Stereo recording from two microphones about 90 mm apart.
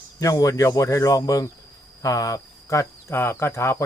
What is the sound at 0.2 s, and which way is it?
Speech, 40° left (ahead or behind).